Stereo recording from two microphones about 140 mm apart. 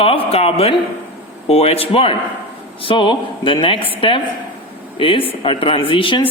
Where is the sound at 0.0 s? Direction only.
45° left (ahead or behind).